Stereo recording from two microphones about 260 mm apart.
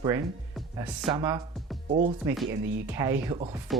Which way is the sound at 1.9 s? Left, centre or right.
Right.